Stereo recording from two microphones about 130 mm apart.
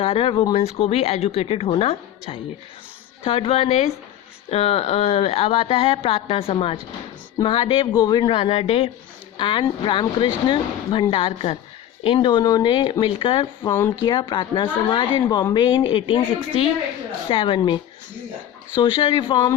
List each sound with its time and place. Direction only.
0.0 s speech: 45° left (ahead or behind)
8.3 s speech: 45° left (ahead or behind)
13.7 s speech: 20° left (ahead or behind)
14.0 s speech: 35° left (ahead or behind)
18.8 s speech: 40° left (ahead or behind)